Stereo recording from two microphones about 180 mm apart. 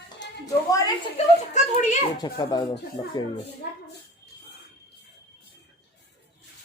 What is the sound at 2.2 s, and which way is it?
Speech, 20° left (ahead or behind).